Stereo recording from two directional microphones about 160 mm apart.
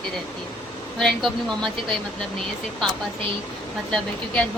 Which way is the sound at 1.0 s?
5° left (ahead or behind).